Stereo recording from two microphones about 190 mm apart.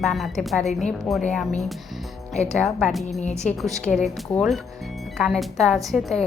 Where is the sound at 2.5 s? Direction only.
Centre (ahead or behind).